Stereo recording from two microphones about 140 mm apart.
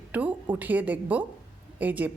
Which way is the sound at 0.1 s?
10° right (ahead or behind).